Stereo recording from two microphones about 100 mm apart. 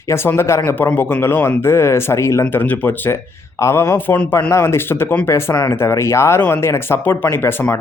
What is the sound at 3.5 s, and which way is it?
Speech, 30° left (ahead or behind).